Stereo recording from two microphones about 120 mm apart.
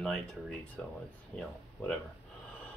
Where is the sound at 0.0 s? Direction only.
5° left (ahead or behind).